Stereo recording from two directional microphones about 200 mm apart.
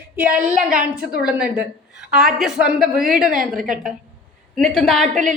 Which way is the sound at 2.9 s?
45° right (ahead or behind).